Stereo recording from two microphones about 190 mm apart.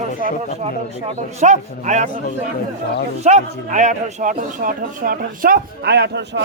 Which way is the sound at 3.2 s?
40° right (ahead or behind).